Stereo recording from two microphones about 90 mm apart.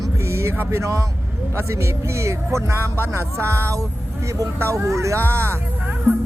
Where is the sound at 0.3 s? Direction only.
30° right (ahead or behind).